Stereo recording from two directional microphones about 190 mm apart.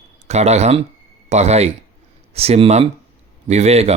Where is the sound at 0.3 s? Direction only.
35° right (ahead or behind).